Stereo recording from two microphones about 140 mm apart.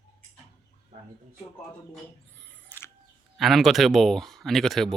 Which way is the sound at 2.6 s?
15° left (ahead or behind).